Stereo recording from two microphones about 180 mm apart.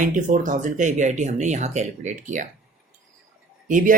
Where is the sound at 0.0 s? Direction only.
45° right (ahead or behind).